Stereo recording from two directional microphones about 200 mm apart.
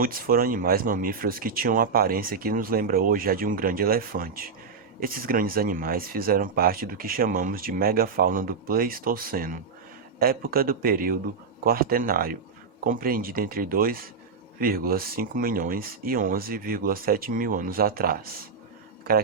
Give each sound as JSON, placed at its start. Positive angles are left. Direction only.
{"t": 0.0, "sound": "speech", "side_deg": -45}